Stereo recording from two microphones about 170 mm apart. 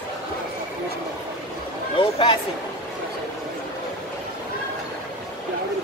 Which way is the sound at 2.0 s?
30° left (ahead or behind).